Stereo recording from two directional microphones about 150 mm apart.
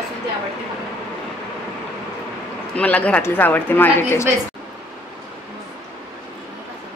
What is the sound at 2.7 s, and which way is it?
A woman's voice, 10° left (ahead or behind).